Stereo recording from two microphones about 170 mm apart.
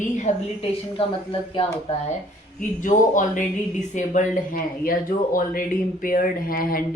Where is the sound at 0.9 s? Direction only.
30° left (ahead or behind).